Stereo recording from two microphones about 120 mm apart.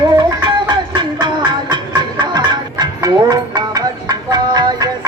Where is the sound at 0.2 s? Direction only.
40° right (ahead or behind).